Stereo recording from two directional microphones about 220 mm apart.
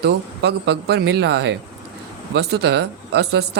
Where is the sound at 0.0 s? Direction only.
50° right (ahead or behind).